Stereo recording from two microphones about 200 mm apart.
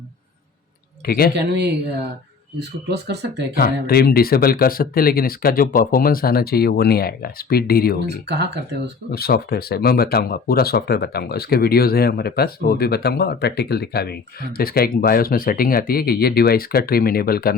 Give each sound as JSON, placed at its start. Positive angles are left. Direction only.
{"t": 1.0, "sound": "speech", "side_deg": 50}
{"t": 1.4, "sound": "speech", "side_deg": -55}
{"t": 2.9, "sound": "speech", "side_deg": -55}
{"t": 3.5, "sound": "speech", "side_deg": 50}
{"t": 8.0, "sound": "speech", "side_deg": -55}
{"t": 9.1, "sound": "speech", "side_deg": 50}